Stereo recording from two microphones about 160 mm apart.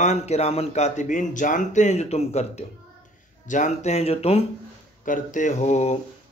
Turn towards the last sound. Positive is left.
turn(degrees=45)  # may be behind; listen again after turning